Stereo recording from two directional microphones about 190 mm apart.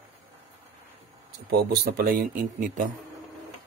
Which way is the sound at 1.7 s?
55° right (ahead or behind).